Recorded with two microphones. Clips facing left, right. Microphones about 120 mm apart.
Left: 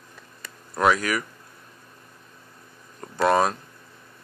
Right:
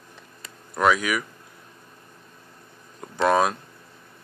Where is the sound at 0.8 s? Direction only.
Centre (ahead or behind).